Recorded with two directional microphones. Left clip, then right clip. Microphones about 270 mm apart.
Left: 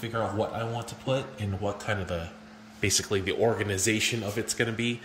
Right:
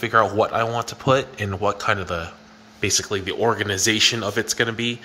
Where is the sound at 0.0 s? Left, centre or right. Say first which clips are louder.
Right 12 dB; centre.